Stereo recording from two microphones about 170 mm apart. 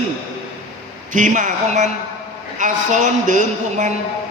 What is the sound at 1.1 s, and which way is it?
A man's voice, 50° right (ahead or behind).